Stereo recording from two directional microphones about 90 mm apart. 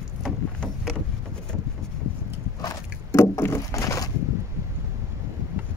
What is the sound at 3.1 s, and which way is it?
Rowboat, 30° left (ahead or behind).